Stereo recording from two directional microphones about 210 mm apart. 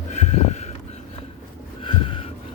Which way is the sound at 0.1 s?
35° left (ahead or behind).